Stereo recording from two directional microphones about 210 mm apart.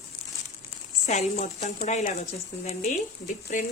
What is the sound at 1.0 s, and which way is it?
A woman's voice, 35° left (ahead or behind).